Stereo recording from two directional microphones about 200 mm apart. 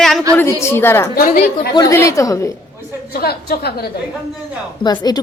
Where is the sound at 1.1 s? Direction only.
40° left (ahead or behind).